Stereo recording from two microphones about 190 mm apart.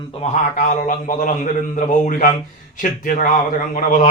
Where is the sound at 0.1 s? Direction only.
35° left (ahead or behind).